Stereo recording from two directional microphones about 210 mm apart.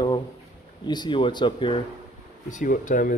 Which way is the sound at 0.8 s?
20° left (ahead or behind).